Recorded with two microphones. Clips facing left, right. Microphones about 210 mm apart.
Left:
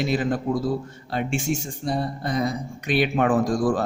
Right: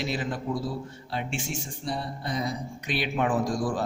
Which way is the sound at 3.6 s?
50° left (ahead or behind).